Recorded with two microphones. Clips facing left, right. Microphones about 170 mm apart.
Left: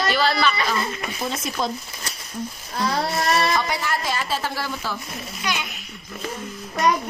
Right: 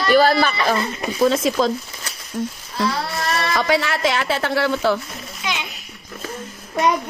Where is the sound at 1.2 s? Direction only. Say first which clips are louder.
Right 9 dB; 90° right.